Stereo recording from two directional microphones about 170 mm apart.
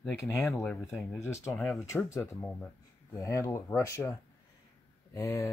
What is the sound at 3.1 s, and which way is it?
Speech, 20° left (ahead or behind).